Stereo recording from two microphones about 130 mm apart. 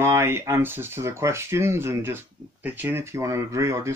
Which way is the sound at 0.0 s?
20° right (ahead or behind).